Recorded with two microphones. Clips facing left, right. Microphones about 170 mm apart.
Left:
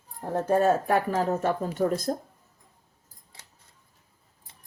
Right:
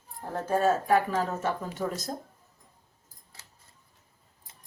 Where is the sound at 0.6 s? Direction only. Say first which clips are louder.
Right 2 dB; 50° left (ahead or behind).